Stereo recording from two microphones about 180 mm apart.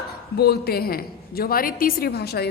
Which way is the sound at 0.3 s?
60° left (ahead or behind).